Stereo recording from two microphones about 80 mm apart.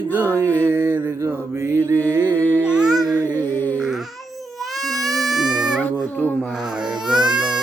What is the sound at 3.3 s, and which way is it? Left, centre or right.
Humming, left.